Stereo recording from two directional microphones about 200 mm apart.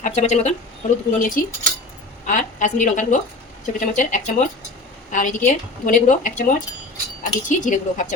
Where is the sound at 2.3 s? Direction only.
40° left (ahead or behind).